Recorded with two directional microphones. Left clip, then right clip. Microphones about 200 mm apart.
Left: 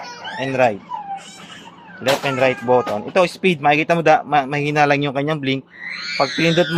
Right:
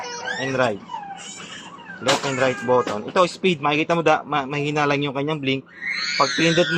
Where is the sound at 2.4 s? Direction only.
45° left (ahead or behind).